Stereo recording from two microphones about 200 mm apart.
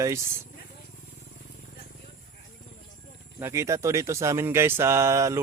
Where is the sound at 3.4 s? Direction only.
15° right (ahead or behind).